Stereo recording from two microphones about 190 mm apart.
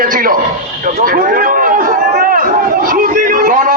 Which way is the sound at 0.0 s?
50° right (ahead or behind).